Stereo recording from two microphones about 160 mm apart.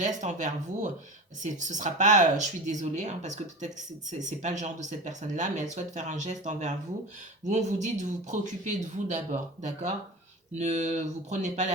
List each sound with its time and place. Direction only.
0.2 s speech: 50° right (ahead or behind)